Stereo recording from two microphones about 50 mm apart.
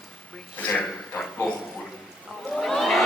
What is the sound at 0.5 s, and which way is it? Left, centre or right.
Speech, left.